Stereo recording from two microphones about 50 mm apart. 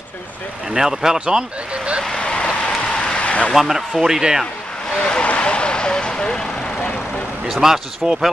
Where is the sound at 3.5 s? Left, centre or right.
Centre.